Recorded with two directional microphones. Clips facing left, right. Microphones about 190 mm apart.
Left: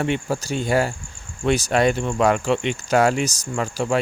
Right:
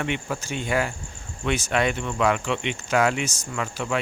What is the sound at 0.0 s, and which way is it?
Speech, 35° left (ahead or behind).